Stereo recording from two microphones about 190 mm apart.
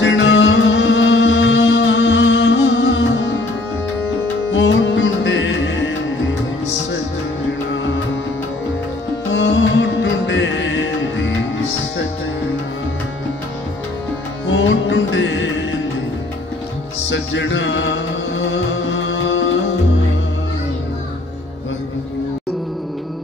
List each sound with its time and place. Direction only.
0.0 s music: 75° left (ahead or behind)
4.5 s music: 70° left (ahead or behind)
9.3 s music: 75° left (ahead or behind)
14.5 s music: 75° left (ahead or behind)
17.1 s music: 70° left (ahead or behind)